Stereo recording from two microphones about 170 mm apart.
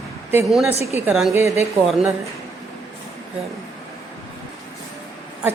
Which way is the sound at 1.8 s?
Centre (ahead or behind).